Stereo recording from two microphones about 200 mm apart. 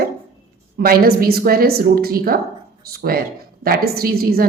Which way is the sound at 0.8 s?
50° right (ahead or behind).